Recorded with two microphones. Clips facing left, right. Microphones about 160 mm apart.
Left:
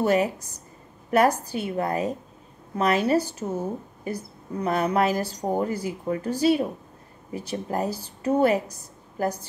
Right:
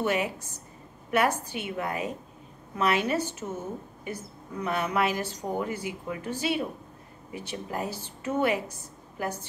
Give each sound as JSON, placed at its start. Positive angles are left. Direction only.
{"t": 0.0, "sound": "a woman's voice", "side_deg": 40}